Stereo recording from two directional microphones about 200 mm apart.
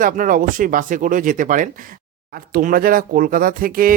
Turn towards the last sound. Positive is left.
turn(degrees=-45)  # may be behind; listen again after turning